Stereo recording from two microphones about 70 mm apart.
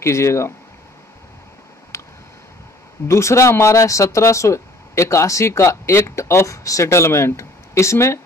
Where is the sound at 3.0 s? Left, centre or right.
Left.